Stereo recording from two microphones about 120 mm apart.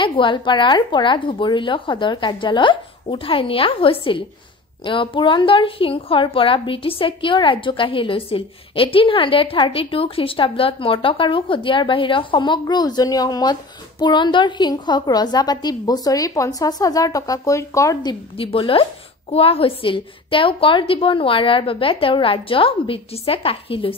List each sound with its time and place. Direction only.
0.0 s a woman's voice: 40° left (ahead or behind); by 18.1 s 25° left (ahead or behind)
18.4 s a woman's voice: 50° left (ahead or behind)